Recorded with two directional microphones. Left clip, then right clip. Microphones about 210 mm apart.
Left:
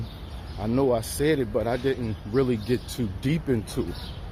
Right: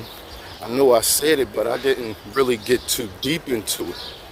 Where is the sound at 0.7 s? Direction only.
25° right (ahead or behind).